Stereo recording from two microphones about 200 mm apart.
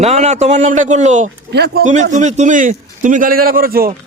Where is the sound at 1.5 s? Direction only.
55° right (ahead or behind).